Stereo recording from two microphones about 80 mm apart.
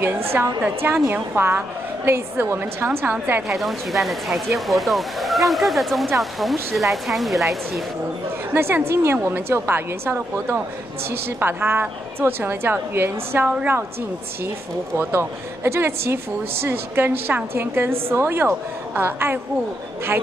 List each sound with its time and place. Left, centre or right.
0.0 s a woman's voice: right
0.6 s a woman's voice: centre
3.4 s speech: centre
8.5 s a woman's voice: right
15.0 s a woman's voice: right